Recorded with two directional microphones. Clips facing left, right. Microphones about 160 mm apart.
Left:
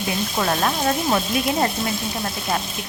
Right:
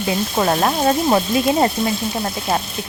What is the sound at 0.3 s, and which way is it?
Stir, 35° right (ahead or behind).